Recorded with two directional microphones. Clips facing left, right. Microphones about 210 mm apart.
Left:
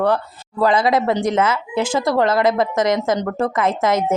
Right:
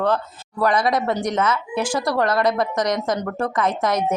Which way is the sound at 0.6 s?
25° left (ahead or behind).